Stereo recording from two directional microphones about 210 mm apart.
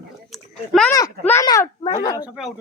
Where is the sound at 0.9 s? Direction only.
10° left (ahead or behind).